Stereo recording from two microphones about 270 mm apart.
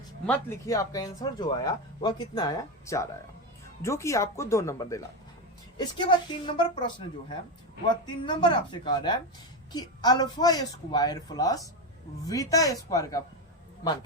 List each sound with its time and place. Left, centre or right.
0.3 s speech: centre